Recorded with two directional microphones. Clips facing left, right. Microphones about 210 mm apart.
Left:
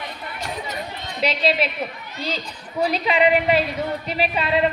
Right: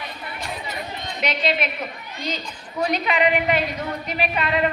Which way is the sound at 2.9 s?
30° left (ahead or behind).